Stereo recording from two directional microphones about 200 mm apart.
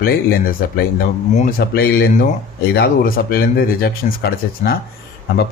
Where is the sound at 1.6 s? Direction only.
50° left (ahead or behind).